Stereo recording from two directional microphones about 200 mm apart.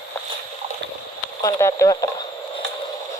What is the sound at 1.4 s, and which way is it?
Speech, 15° left (ahead or behind).